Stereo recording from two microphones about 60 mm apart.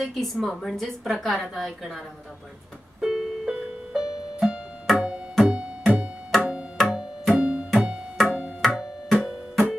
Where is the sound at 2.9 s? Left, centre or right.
Centre.